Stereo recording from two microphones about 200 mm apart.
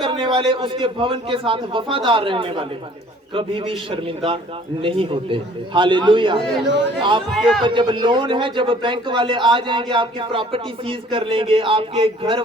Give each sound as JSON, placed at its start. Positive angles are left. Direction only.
{"t": 0.0, "sound": "a man's voice", "side_deg": -25}
{"t": 7.3, "sound": "a man's voice", "side_deg": 0}
{"t": 7.6, "sound": "a man's voice", "side_deg": -25}